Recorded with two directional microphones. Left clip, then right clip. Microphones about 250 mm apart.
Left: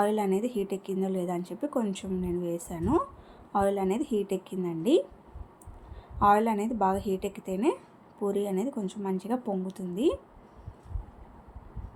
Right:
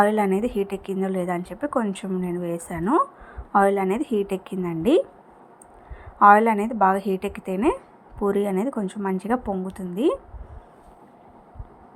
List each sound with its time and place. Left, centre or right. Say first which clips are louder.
0.0 s a woman's voice: right 7 dB; centre
6.1 s a woman's voice: right 9 dB; centre